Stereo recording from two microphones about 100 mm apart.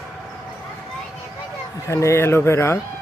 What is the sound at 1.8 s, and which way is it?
Speech, 30° left (ahead or behind).